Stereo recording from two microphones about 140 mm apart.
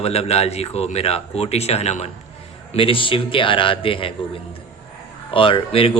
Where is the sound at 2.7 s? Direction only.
40° left (ahead or behind).